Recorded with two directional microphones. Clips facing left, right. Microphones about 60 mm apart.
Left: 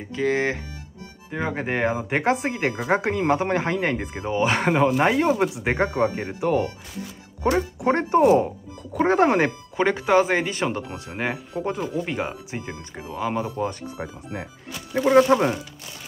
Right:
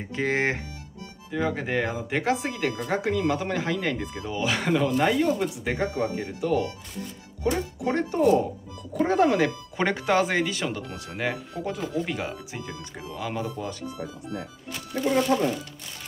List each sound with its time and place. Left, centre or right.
0.1 s speech: centre
1.3 s speech: left
5.0 s speech: left
9.8 s speech: centre; by 14.4 s left
15.1 s speech: left